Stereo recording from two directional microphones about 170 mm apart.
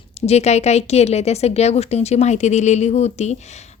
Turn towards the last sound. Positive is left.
turn(degrees=40)  # may be behind; listen again after turning